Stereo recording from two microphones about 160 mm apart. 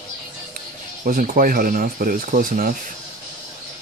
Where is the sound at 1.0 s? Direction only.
60° right (ahead or behind).